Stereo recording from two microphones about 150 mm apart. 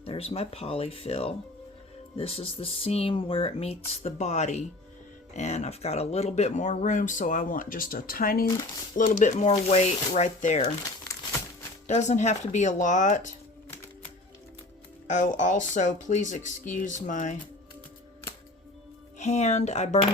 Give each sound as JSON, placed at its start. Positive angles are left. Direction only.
{"t": 0.0, "sound": "speech", "side_deg": 40}
{"t": 9.0, "sound": "speech", "side_deg": 60}
{"t": 11.9, "sound": "speech", "side_deg": 50}
{"t": 15.0, "sound": "speech", "side_deg": 55}
{"t": 19.2, "sound": "speech", "side_deg": 50}